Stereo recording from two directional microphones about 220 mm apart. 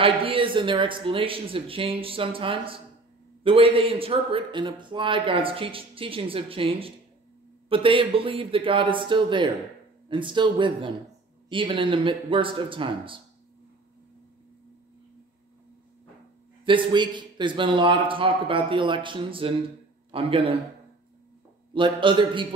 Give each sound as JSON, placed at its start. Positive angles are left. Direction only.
{"t": 0.0, "sound": "speech", "side_deg": -25}
{"t": 16.6, "sound": "speech", "side_deg": -20}
{"t": 21.7, "sound": "speech", "side_deg": -20}